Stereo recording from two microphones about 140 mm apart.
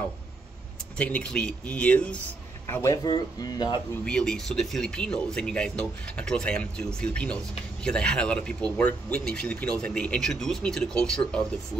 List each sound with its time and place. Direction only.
0.9 s speech: 10° left (ahead or behind)
2.6 s speech: 20° left (ahead or behind)
4.0 s speech: 5° left (ahead or behind)